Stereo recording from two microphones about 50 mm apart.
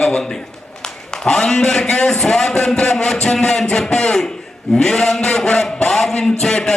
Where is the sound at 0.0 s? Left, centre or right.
Centre.